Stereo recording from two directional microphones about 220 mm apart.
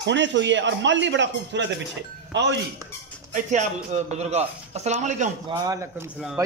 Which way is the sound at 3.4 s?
30° right (ahead or behind).